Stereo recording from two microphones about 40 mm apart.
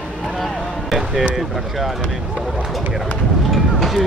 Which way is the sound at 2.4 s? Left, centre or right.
Centre.